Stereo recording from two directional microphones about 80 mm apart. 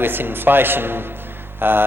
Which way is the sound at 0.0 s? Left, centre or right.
Right.